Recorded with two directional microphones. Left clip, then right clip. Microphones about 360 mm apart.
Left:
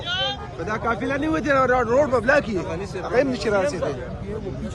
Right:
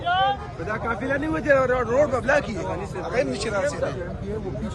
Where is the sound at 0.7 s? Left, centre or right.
Left.